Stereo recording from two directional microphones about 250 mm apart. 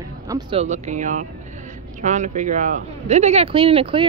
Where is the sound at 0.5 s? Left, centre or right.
Right.